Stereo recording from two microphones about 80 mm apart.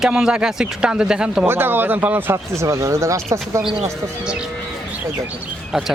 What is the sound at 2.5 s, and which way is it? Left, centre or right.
Speech, right.